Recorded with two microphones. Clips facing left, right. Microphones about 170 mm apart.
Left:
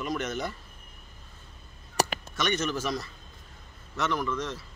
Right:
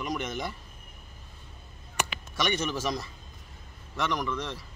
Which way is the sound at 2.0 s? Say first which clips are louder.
Left 6 dB; 35° left (ahead or behind).